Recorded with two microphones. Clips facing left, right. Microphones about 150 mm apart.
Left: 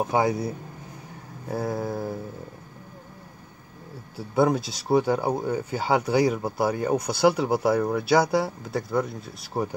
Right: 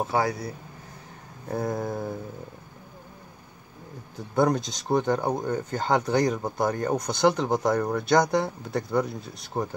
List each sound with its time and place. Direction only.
0.0 s speech: 20° left (ahead or behind)
1.5 s a sound: 5° left (ahead or behind)
4.2 s speech: 5° left (ahead or behind)